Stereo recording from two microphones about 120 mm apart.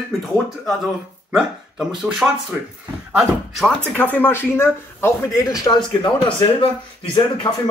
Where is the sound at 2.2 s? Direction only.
10° right (ahead or behind).